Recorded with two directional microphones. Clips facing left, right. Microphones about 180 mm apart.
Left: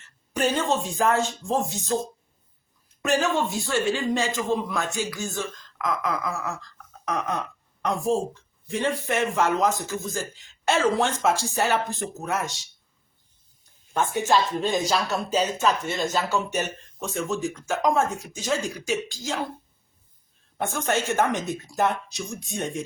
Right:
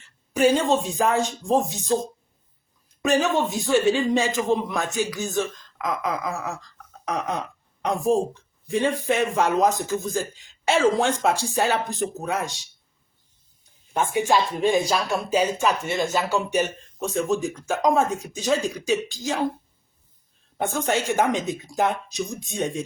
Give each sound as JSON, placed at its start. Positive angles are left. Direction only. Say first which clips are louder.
{"t": 0.3, "sound": "speech", "louder": "right 5 dB", "side_deg": -10}
{"t": 3.0, "sound": "speech", "louder": "right 2 dB", "side_deg": -20}
{"t": 13.9, "sound": "speech", "louder": "right 1 dB", "side_deg": -10}
{"t": 20.6, "sound": "speech", "louder": "right 2 dB", "side_deg": -15}